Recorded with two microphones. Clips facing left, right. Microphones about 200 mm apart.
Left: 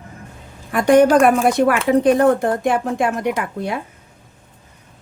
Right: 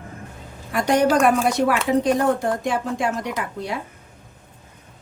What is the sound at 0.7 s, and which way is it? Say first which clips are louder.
A woman's voice: left 6 dB; 55° left (ahead or behind).